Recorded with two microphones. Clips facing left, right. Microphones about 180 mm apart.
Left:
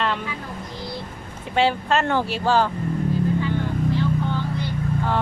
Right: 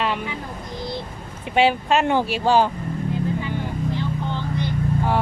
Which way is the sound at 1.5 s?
15° right (ahead or behind).